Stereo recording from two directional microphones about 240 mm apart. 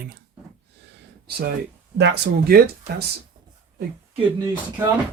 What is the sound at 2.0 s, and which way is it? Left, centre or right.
Speech, right.